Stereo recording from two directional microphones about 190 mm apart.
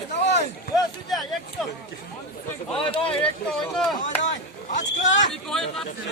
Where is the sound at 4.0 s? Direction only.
40° left (ahead or behind).